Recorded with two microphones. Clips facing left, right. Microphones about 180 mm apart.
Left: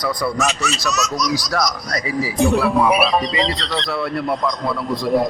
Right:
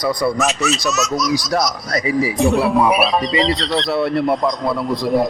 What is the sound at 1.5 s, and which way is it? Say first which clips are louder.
Speech: right 3 dB; 20° right (ahead or behind).